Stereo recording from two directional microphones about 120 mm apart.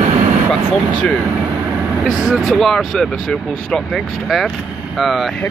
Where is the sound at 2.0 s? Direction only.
Centre (ahead or behind).